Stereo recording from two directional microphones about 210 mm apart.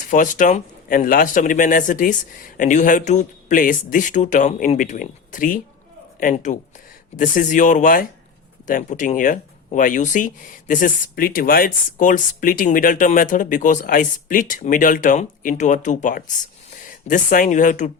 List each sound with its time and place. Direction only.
0.0 s speech: 40° left (ahead or behind)